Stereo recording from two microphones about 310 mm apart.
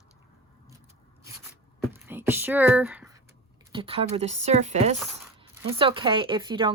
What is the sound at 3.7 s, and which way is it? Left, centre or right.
Speech, centre.